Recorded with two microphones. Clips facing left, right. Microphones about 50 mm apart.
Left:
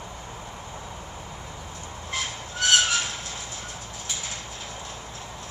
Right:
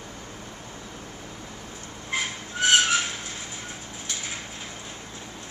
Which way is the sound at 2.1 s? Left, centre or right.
Centre.